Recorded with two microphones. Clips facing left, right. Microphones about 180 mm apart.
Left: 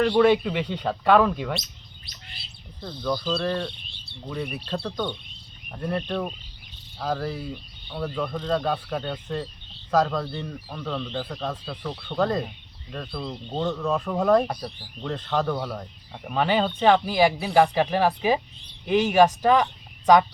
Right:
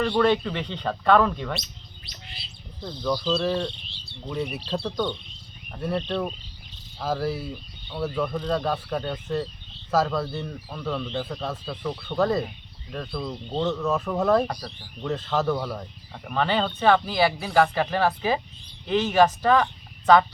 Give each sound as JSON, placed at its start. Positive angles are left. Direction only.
{"t": 0.0, "sound": "speech", "side_deg": 10}
{"t": 2.8, "sound": "a man's voice", "side_deg": -5}
{"t": 3.4, "sound": "cricket", "side_deg": -5}
{"t": 4.3, "sound": "a man's voice", "side_deg": -5}
{"t": 4.8, "sound": "cricket", "side_deg": -15}
{"t": 6.0, "sound": "speech", "side_deg": 10}
{"t": 7.0, "sound": "a man's voice", "side_deg": -5}
{"t": 16.2, "sound": "speech", "side_deg": 10}